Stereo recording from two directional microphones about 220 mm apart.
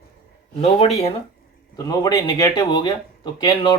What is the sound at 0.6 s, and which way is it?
Speech, 30° left (ahead or behind).